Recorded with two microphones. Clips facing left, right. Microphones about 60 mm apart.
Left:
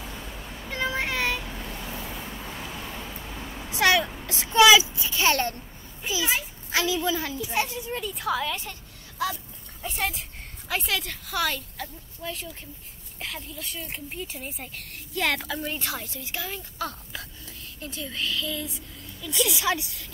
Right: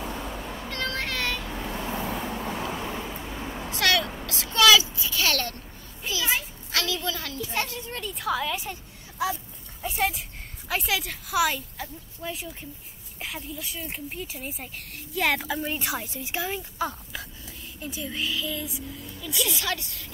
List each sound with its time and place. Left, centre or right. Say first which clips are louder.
0.0 s meow: right 5 dB; right
0.7 s vehicle: left 4 dB; centre
1.7 s vehicle: right 5 dB; right
2.0 s vehicle: right 6 dB; right
2.7 s vehicle: right 5 dB; right
3.0 s vehicle: right 3 dB; centre
3.7 s a sound: left 3 dB; centre
6.7 s a woman's voice: left 4 dB; centre
9.2 s speech: right 1 dB; centre
9.8 s a woman's voice: right 3 dB; centre
19.6 s a woman's voice: left 4 dB; centre